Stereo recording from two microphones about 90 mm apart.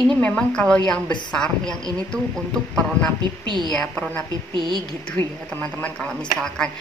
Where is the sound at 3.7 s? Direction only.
10° left (ahead or behind).